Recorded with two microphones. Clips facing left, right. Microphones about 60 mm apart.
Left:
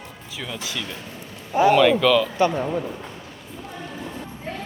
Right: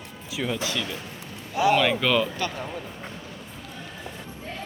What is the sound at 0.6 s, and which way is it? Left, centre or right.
Speech, centre.